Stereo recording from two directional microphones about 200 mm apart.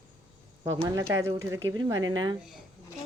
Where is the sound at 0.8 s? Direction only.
15° right (ahead or behind).